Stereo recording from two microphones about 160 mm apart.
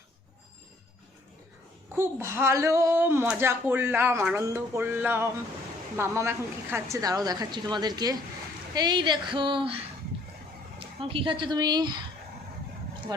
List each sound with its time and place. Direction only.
2.0 s speech: 15° right (ahead or behind); by 9.7 s 30° right (ahead or behind)
10.8 s speech: 35° right (ahead or behind)
13.1 s speech: 25° right (ahead or behind)